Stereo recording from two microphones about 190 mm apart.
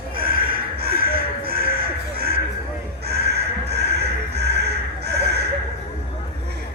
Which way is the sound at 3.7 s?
60° right (ahead or behind).